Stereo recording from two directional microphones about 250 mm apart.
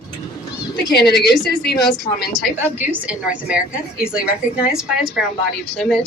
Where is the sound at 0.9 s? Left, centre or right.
Left.